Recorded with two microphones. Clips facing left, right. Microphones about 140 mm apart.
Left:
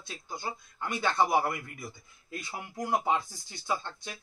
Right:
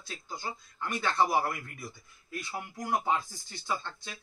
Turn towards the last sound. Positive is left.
turn(degrees=15)  # may be behind; listen again after turning